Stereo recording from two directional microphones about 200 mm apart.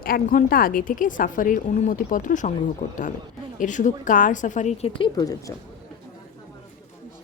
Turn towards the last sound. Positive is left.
turn(degrees=20)  # may be behind; listen again after turning